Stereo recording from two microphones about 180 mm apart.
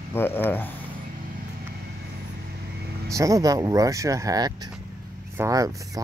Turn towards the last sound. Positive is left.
turn(degrees=-15)  # may be behind; listen again after turning